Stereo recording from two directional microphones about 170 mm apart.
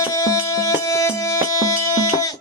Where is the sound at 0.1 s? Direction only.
20° left (ahead or behind).